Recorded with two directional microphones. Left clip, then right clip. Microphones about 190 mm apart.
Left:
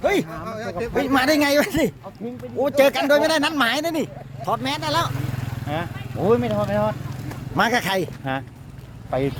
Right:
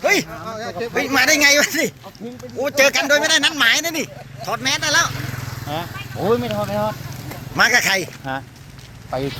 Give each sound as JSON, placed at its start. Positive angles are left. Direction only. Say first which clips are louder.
{"t": 0.0, "sound": "speech", "louder": "right 3 dB", "side_deg": 15}
{"t": 5.6, "sound": "speech", "louder": "right 1 dB", "side_deg": -5}
{"t": 7.5, "sound": "speech", "louder": "right 5 dB", "side_deg": 20}
{"t": 8.2, "sound": "speech", "louder": "even", "side_deg": 10}